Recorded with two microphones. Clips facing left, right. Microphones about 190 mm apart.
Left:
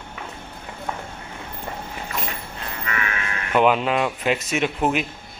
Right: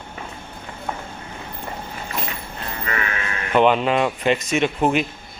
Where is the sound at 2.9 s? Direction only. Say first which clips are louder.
Right 2 dB; 30° right (ahead or behind).